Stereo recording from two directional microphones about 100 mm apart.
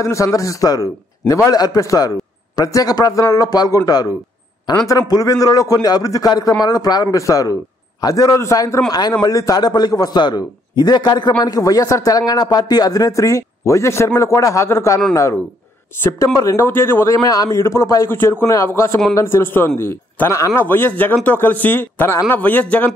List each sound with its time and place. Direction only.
0.0 s a man's voice: 30° left (ahead or behind)
16.0 s a man's voice: 25° left (ahead or behind)
16.6 s speech: 20° left (ahead or behind)
17.2 s speech: 35° left (ahead or behind); by 22.8 s 20° left (ahead or behind)